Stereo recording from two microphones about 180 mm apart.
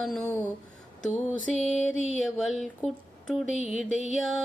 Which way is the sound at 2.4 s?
Centre (ahead or behind).